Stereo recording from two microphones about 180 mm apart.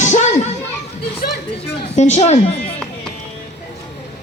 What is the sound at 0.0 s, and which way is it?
Children playing, 40° left (ahead or behind).